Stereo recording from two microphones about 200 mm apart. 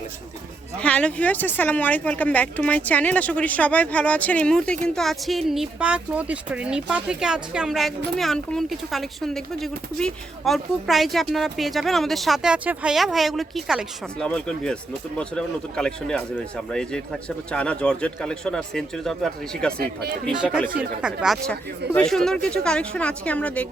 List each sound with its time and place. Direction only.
0.8 s speech: 5° left (ahead or behind)
19.8 s speech: 50° right (ahead or behind)
20.2 s speech: 5° right (ahead or behind)